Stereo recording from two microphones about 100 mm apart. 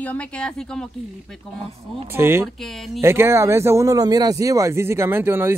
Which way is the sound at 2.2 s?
25° right (ahead or behind).